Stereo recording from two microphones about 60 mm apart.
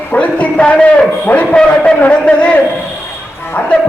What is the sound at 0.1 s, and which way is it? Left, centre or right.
Speech, left.